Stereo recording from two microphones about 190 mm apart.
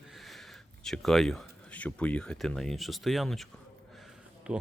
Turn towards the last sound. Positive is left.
turn(degrees=-5)  # may be behind; listen again after turning